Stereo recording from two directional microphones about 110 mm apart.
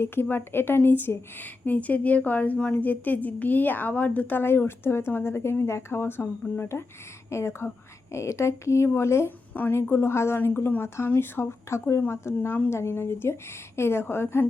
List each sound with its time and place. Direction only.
0.0 s a woman's voice: 20° left (ahead or behind)